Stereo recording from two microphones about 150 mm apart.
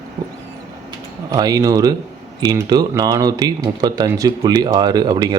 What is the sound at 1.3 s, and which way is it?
A man's voice, 25° right (ahead or behind).